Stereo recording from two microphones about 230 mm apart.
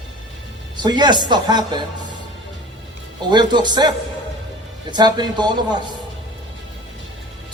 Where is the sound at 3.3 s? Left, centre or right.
Centre.